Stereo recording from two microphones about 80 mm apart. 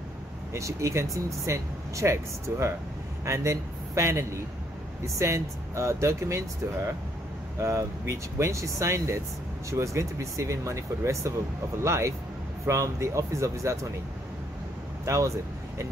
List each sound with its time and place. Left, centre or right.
0.5 s a man's voice: right
15.0 s speech: right